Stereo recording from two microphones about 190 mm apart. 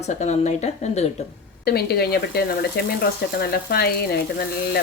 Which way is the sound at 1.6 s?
55° left (ahead or behind).